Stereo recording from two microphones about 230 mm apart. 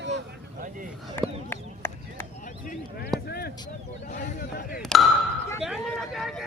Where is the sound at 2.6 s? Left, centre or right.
Left.